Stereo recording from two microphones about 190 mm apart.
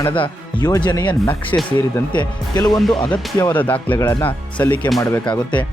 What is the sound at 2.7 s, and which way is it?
Speech, centre (ahead or behind).